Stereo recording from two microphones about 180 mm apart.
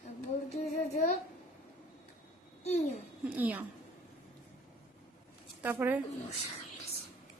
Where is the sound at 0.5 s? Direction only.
40° left (ahead or behind).